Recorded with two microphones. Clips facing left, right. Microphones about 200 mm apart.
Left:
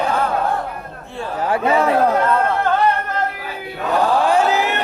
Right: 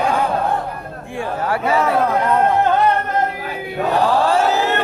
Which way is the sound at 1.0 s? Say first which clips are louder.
Right 3 dB; 15° right (ahead or behind).